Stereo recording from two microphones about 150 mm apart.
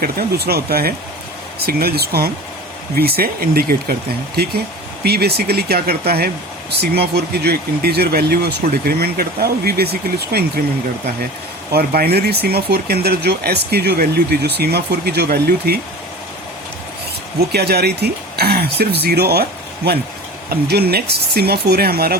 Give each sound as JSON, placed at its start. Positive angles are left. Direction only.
{"t": 0.0, "sound": "speech", "side_deg": -90}
{"t": 5.0, "sound": "speech", "side_deg": -90}
{"t": 11.7, "sound": "speech", "side_deg": -90}
{"t": 17.5, "sound": "speech", "side_deg": -90}